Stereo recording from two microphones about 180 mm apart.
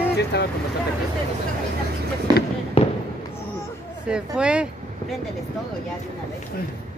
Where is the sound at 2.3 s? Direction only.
20° right (ahead or behind).